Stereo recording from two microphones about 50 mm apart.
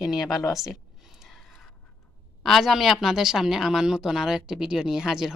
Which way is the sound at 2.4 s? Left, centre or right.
Centre.